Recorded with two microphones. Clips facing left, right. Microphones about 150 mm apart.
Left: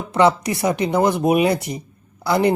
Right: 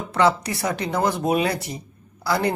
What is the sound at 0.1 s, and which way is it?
Speech, 20° left (ahead or behind).